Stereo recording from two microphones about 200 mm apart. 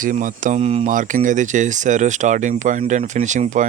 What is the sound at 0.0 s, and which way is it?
Speech, 40° right (ahead or behind).